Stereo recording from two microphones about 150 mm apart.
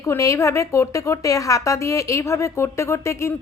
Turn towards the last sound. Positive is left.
turn(degrees=20)  # may be behind; listen again after turning